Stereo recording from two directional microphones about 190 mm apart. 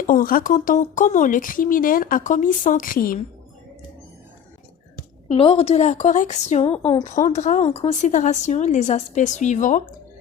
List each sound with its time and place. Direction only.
0.1 s speech: 50° left (ahead or behind)
5.3 s a woman's voice: 30° left (ahead or behind)